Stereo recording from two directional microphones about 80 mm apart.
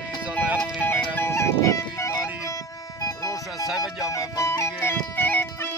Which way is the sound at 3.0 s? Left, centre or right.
Left.